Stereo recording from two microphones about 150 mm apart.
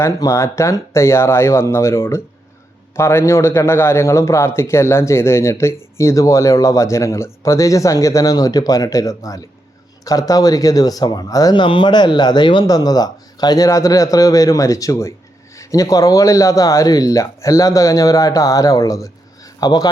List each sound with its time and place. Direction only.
0.0 s a man's voice: 20° left (ahead or behind)